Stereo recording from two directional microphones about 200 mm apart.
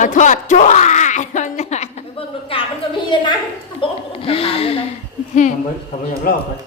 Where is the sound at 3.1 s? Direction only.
20° left (ahead or behind).